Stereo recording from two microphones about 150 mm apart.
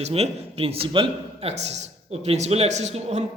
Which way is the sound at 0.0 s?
45° right (ahead or behind).